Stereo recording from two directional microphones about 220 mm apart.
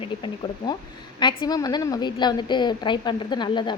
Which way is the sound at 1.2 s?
20° left (ahead or behind).